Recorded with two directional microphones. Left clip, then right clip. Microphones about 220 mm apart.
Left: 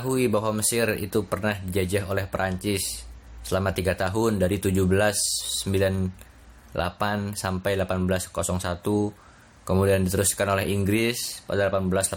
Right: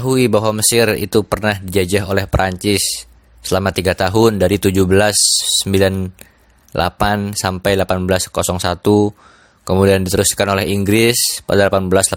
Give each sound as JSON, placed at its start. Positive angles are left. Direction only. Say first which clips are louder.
{"t": 0.0, "sound": "speech", "louder": "right 10 dB", "side_deg": -45}